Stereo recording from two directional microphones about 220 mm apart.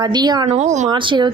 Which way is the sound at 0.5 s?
30° right (ahead or behind).